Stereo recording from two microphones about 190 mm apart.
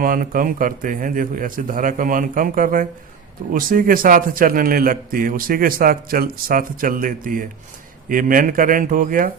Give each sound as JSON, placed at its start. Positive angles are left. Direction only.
{"t": 0.0, "sound": "speech", "side_deg": -45}